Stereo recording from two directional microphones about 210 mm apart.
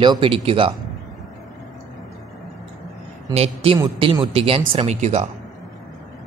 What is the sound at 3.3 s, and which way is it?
Speech, 30° right (ahead or behind).